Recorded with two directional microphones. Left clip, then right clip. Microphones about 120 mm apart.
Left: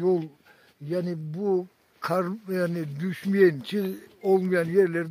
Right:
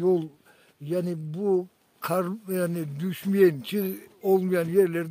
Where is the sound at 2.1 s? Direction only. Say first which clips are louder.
Even; 5° right (ahead or behind).